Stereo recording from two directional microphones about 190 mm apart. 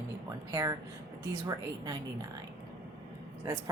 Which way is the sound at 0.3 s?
15° right (ahead or behind).